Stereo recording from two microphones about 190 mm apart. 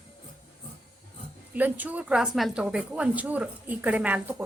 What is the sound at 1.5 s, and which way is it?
A woman's voice, 10° right (ahead or behind).